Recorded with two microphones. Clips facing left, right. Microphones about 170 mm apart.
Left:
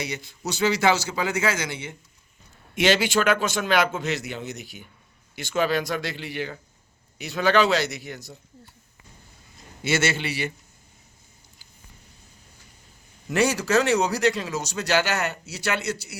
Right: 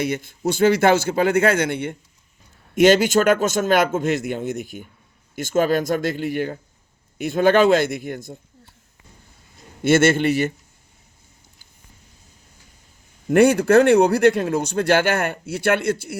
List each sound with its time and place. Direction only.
0.0 s speech: 50° right (ahead or behind)
2.7 s speech: 45° right (ahead or behind)
9.8 s speech: 50° right (ahead or behind)
13.2 s speech: 55° right (ahead or behind)